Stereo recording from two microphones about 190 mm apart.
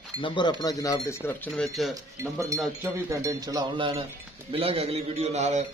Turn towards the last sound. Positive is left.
turn(degrees=-40)  # may be behind; listen again after turning